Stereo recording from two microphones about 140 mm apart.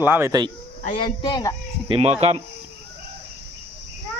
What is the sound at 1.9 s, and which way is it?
Speech, 45° right (ahead or behind).